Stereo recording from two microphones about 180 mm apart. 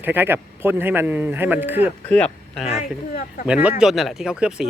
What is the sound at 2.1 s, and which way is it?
Speech, 5° left (ahead or behind).